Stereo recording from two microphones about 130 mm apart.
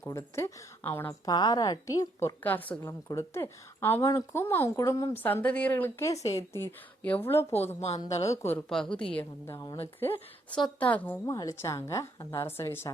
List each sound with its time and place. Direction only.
0.1 s a woman's voice: 20° left (ahead or behind)
1.2 s a woman's voice: 30° left (ahead or behind); by 11.2 s 10° left (ahead or behind)
11.3 s a woman's voice: 25° left (ahead or behind)